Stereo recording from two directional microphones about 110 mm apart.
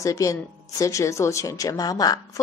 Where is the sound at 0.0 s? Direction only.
30° left (ahead or behind).